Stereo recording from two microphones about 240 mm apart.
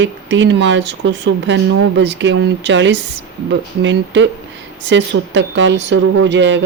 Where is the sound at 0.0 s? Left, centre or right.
Right.